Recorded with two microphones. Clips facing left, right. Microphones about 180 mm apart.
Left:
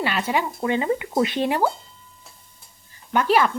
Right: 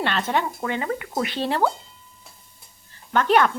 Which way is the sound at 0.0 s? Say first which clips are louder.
Even; 10° left (ahead or behind).